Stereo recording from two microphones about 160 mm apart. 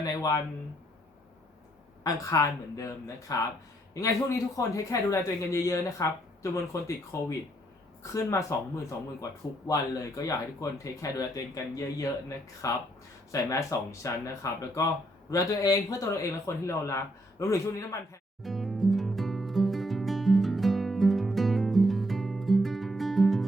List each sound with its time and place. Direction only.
0.0 s speech: 20° left (ahead or behind)
2.0 s speech: 20° left (ahead or behind)
18.4 s music: centre (ahead or behind)